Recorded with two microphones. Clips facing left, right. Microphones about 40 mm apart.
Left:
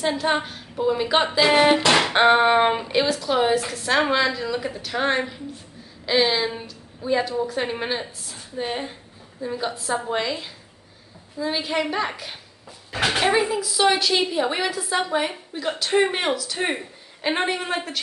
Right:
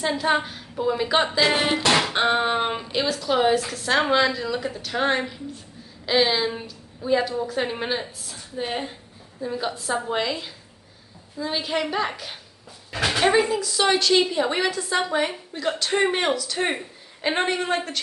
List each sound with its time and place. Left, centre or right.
0.0 s a woman's voice: centre
1.7 s music: left
3.1 s a woman's voice: centre